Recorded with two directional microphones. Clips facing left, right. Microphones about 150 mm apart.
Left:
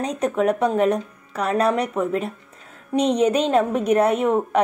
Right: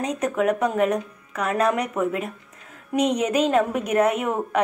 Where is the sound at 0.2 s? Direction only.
30° left (ahead or behind).